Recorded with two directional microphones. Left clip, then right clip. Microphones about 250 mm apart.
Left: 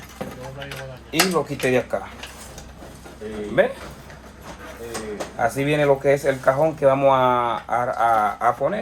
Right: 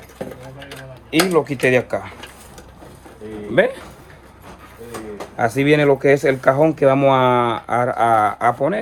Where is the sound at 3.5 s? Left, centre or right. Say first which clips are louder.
Right 3 dB; right.